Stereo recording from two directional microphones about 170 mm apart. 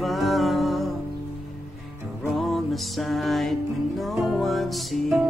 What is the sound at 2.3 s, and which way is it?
Music, centre (ahead or behind).